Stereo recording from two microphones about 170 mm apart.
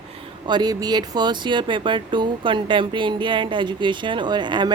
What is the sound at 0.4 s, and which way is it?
Speech, 25° right (ahead or behind).